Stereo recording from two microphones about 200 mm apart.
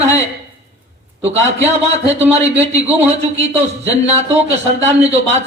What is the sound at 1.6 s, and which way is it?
Speech, 35° right (ahead or behind).